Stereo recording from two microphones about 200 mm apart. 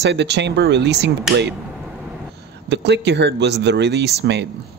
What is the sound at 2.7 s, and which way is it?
Speech, 60° right (ahead or behind).